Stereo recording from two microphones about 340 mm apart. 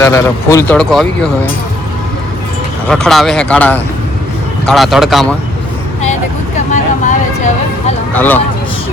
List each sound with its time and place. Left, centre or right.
0.0 s speech: centre
2.8 s speech: centre
6.7 s vehicle: left
8.1 s speech: centre